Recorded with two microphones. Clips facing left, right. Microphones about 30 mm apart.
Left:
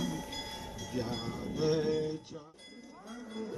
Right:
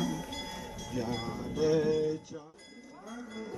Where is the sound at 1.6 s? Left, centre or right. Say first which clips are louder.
Right 3 dB; left.